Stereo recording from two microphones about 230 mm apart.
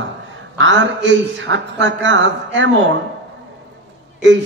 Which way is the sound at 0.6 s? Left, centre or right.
Right.